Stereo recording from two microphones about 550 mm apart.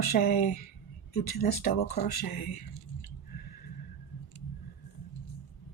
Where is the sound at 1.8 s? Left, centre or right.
Left.